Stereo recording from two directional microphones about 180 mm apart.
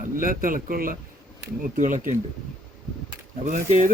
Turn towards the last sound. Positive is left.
turn(degrees=-45)  # may be behind; listen again after turning